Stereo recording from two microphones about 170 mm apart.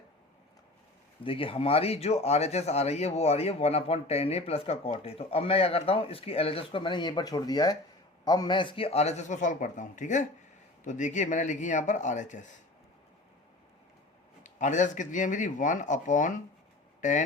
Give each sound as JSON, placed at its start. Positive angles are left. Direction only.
{"t": 1.2, "sound": "speech", "side_deg": 30}
{"t": 14.4, "sound": "speech", "side_deg": 45}